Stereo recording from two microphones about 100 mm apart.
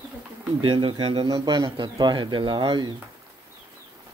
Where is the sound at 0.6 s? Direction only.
60° right (ahead or behind).